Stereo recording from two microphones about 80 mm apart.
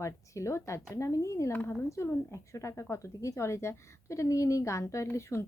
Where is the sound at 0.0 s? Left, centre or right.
Left.